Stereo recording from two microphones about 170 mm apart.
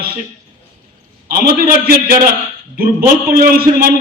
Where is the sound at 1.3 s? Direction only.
60° right (ahead or behind).